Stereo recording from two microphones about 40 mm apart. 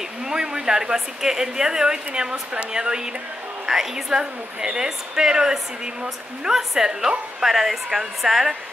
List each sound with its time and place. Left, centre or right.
0.3 s a sound: centre
0.9 s a woman's voice: centre
7.4 s speech: centre